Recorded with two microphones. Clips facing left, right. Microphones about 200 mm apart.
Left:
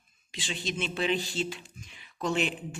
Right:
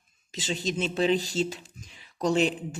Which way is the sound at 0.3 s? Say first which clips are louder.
Right 5 dB; 40° right (ahead or behind).